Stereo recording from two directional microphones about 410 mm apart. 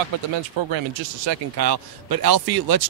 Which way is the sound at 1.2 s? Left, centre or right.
Right.